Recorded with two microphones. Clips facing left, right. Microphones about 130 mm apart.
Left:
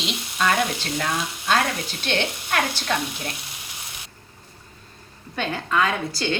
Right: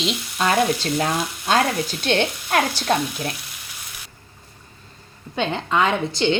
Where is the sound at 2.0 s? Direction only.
45° right (ahead or behind).